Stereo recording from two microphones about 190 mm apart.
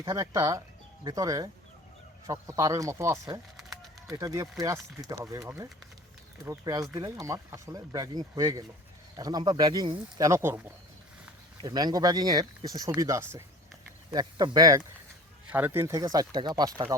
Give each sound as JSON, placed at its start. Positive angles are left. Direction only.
{"t": 0.0, "sound": "speech", "side_deg": -15}
{"t": 3.6, "sound": "bird", "side_deg": 0}
{"t": 4.1, "sound": "speech", "side_deg": -20}